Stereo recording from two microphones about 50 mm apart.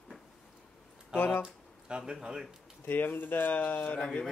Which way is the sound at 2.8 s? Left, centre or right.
Left.